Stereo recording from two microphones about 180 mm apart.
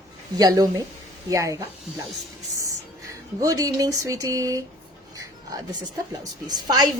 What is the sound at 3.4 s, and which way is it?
Speech, 20° right (ahead or behind).